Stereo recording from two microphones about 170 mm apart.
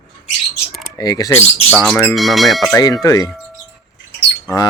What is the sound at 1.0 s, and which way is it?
Speech, 20° left (ahead or behind).